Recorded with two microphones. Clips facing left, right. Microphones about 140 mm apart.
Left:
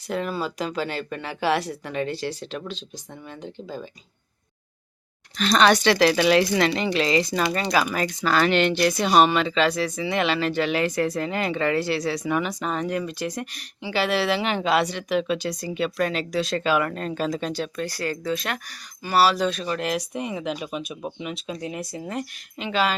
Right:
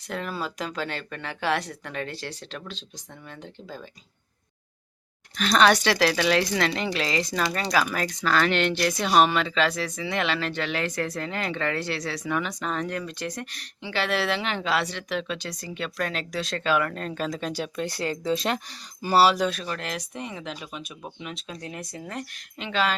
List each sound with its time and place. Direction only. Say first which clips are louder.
0.1 s speech: left 5 dB; centre (ahead or behind)
5.4 s speech: left 1 dB; 5° right (ahead or behind)
17.5 s speech: left 2 dB; 10° right (ahead or behind)
17.8 s speech: right 3 dB; 25° right (ahead or behind)
19.6 s speech: left 6 dB; 10° left (ahead or behind)